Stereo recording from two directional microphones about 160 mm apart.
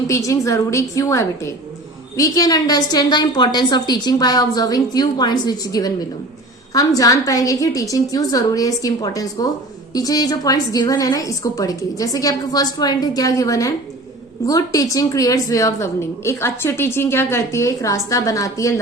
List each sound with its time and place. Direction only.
0.1 s a woman's voice: 20° left (ahead or behind)